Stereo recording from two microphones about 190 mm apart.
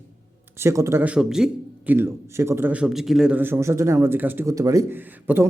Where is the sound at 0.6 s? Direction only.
15° right (ahead or behind).